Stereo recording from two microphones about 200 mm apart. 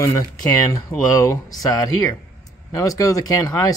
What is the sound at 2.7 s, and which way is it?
Speech, 15° left (ahead or behind).